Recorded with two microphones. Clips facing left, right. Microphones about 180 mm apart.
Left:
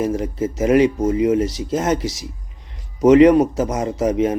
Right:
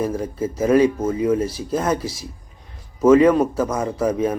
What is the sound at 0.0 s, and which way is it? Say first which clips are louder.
Speech: left 2 dB; 20° left (ahead or behind).